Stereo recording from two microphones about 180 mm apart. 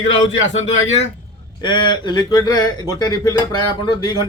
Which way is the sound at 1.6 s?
25° left (ahead or behind).